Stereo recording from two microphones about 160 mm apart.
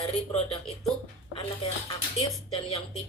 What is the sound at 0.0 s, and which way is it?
Speech, 35° left (ahead or behind).